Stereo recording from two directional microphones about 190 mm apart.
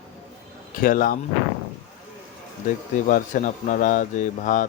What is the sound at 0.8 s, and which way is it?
Speech, 45° left (ahead or behind).